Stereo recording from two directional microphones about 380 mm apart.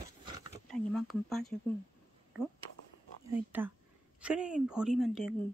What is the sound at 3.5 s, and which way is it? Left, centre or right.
A woman's voice, centre.